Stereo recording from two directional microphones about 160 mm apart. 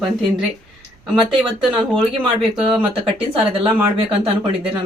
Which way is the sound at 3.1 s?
35° right (ahead or behind).